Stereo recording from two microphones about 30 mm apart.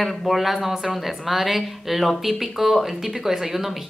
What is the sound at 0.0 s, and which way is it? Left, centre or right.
A woman's voice, centre.